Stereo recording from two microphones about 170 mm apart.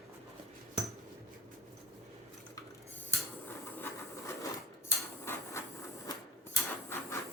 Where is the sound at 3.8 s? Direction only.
15° left (ahead or behind).